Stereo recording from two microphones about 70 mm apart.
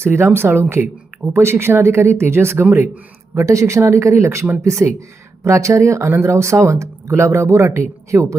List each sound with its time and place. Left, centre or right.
0.0 s speech: right
3.3 s speech: right